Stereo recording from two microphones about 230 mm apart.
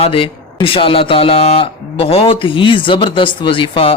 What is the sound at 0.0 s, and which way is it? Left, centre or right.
Speech, left.